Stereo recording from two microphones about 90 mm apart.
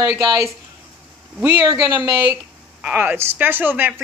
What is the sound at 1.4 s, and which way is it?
Speech, 50° right (ahead or behind).